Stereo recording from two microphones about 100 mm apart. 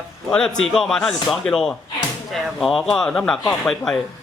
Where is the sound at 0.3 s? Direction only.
5° left (ahead or behind).